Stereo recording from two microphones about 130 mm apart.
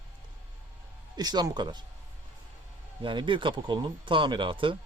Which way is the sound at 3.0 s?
40° right (ahead or behind).